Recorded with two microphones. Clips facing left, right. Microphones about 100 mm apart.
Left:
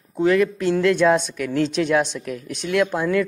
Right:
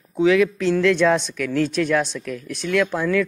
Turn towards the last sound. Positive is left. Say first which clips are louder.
# even
turn(degrees=15)  # may be behind; listen again after turning